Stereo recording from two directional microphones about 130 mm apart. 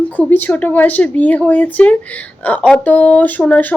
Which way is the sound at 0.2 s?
10° left (ahead or behind).